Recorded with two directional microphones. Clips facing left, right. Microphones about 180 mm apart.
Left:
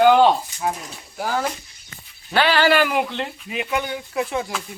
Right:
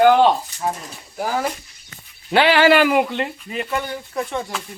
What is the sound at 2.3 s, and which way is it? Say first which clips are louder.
Speech: right 4 dB; 20° right (ahead or behind).